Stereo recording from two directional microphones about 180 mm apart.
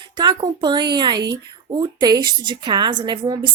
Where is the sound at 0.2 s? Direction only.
25° right (ahead or behind).